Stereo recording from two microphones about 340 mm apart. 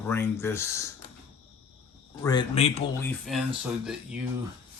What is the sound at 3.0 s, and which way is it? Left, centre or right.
Speech, centre.